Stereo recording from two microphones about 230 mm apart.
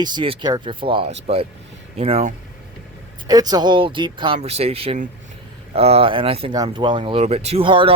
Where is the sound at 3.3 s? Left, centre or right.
Centre.